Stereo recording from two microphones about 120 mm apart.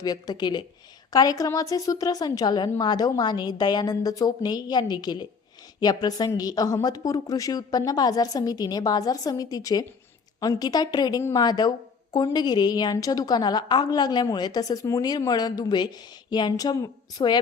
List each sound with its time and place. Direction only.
0.0 s a woman's voice: 35° left (ahead or behind)